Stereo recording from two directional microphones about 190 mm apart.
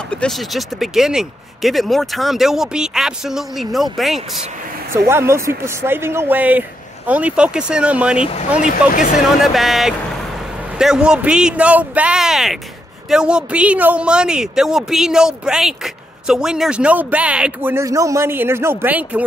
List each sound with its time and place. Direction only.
0.1 s a man's voice: 5° left (ahead or behind)
4.9 s speech: 15° right (ahead or behind)
8.2 s speech: 35° left (ahead or behind)
9.4 s a man's voice: centre (ahead or behind)